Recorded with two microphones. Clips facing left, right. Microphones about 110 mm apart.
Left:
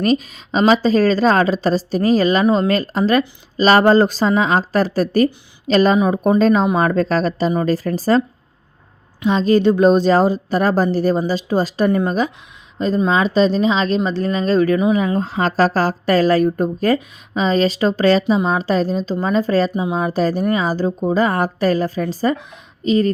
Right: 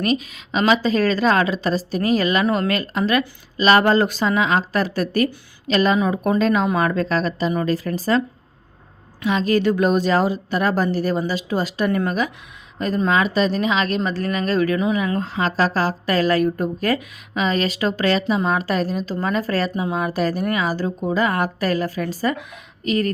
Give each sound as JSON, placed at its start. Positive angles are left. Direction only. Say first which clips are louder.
{"t": 0.0, "sound": "a woman's voice", "louder": "left 4 dB", "side_deg": 35}
{"t": 9.2, "sound": "a woman's voice", "louder": "left 4 dB", "side_deg": 30}